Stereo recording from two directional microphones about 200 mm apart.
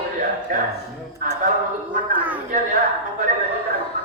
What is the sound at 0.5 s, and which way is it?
Speech, 45° right (ahead or behind).